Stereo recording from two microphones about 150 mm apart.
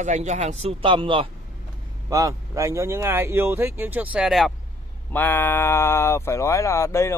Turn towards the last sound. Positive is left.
turn(degrees=20)  # may be behind; listen again after turning